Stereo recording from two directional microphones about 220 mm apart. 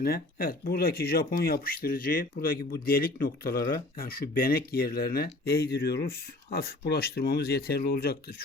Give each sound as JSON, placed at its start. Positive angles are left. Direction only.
{"t": 0.0, "sound": "speech", "side_deg": 45}